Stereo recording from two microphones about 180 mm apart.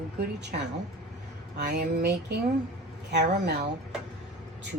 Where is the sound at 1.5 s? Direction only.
65° right (ahead or behind).